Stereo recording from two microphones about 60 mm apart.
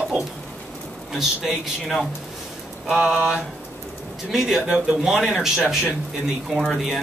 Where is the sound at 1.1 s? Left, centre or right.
Centre.